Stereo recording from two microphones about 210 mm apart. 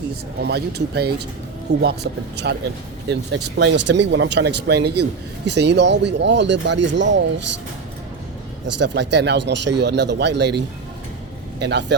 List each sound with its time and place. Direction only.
0.4 s a man's voice: 50° right (ahead or behind)
8.6 s a man's voice: 55° right (ahead or behind)
11.6 s a man's voice: 55° right (ahead or behind)